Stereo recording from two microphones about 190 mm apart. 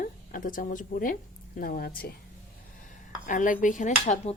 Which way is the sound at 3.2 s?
45° left (ahead or behind).